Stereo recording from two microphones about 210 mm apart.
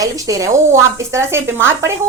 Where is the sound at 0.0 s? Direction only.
15° right (ahead or behind).